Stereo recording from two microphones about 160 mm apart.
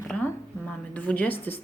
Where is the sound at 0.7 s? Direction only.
10° left (ahead or behind).